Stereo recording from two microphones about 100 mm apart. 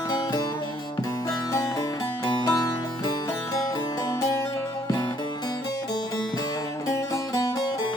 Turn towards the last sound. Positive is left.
turn(degrees=40)  # may be behind; listen again after turning